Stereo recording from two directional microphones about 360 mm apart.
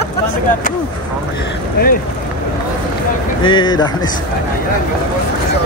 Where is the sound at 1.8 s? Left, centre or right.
Left.